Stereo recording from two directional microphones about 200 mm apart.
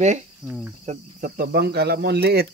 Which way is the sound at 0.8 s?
45° right (ahead or behind).